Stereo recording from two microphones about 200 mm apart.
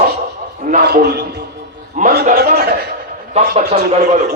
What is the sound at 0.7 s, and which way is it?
A man's voice, 55° right (ahead or behind).